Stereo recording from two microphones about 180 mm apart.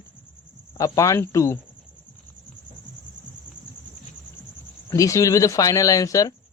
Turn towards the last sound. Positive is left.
turn(degrees=20)  # may be behind; listen again after turning